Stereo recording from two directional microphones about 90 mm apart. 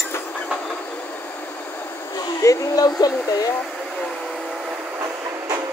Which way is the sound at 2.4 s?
40° left (ahead or behind).